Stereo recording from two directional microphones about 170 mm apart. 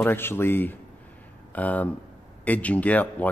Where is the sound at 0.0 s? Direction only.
15° left (ahead or behind).